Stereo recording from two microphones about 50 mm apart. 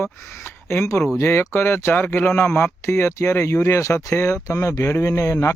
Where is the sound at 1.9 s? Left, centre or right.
Left.